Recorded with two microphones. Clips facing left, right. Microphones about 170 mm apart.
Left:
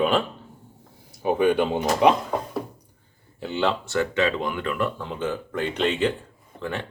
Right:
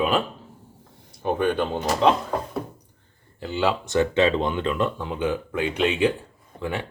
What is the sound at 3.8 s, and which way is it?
Speech, 20° right (ahead or behind).